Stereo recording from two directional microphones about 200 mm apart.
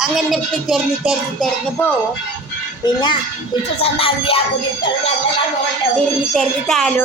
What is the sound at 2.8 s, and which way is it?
Speech, 20° left (ahead or behind).